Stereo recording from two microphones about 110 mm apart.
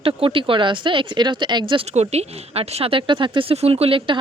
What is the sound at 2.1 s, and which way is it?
Speech, 75° right (ahead or behind).